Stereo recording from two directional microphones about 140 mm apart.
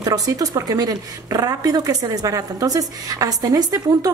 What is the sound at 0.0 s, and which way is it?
Speech, 25° right (ahead or behind).